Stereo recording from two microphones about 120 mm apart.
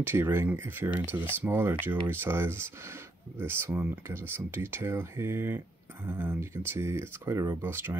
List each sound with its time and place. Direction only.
0.0 s speech: 20° right (ahead or behind)